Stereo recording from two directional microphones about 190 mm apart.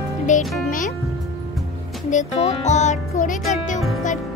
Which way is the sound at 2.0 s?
40° left (ahead or behind).